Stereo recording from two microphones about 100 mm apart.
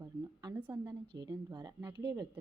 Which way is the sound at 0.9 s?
45° right (ahead or behind).